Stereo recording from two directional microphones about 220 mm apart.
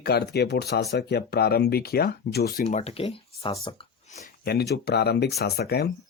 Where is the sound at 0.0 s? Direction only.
45° left (ahead or behind).